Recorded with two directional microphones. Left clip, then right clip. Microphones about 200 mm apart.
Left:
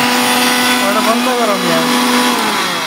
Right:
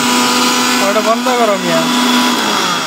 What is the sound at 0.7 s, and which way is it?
Speech, 20° right (ahead or behind).